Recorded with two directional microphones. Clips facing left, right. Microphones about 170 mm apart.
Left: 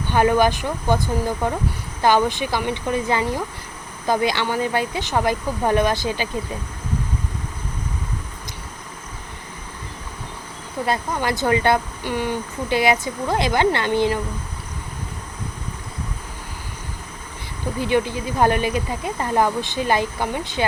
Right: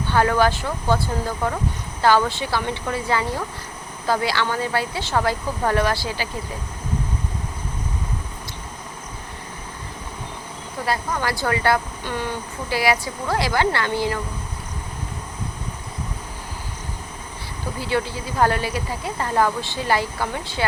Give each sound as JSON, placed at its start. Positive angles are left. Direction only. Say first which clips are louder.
{"t": 0.1, "sound": "speech", "louder": "left 2 dB", "side_deg": 15}
{"t": 10.8, "sound": "speech", "louder": "left 1 dB", "side_deg": 20}
{"t": 17.7, "sound": "speech", "louder": "left 4 dB", "side_deg": 20}